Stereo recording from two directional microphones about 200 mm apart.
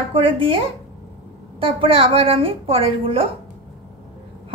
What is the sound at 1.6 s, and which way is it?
A woman's voice, 30° right (ahead or behind).